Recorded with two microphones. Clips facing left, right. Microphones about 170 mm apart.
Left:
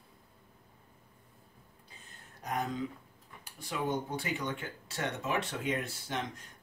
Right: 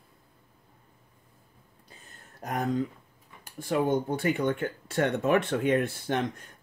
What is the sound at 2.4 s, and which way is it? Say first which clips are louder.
Speech: right 6 dB; 50° right (ahead or behind).